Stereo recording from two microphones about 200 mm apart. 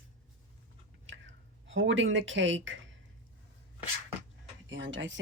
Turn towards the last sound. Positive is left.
turn(degrees=-65)  # may be behind; listen again after turning